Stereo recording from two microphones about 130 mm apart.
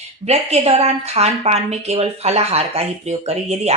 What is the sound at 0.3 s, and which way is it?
Speech, 55° right (ahead or behind).